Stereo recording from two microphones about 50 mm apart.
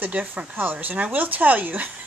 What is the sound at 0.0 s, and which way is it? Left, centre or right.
A woman's voice, right.